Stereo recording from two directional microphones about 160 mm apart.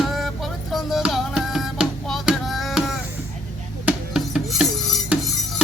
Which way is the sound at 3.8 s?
5° right (ahead or behind).